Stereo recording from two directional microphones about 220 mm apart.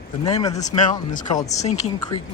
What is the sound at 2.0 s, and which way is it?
Speech, 20° left (ahead or behind).